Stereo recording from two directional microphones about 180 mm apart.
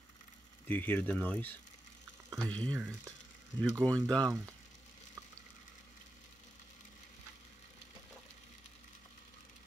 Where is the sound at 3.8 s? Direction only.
20° right (ahead or behind).